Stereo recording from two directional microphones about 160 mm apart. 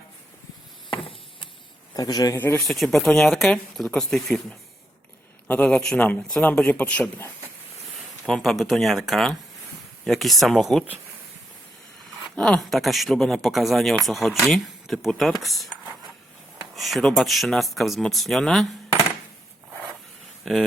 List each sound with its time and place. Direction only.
1.9 s speech: 25° left (ahead or behind)
2.6 s speech: centre (ahead or behind)
12.4 s speech: centre (ahead or behind)
16.7 s speech: centre (ahead or behind)
20.4 s speech: centre (ahead or behind)